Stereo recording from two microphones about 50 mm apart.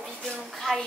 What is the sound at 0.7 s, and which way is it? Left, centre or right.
Speech, centre.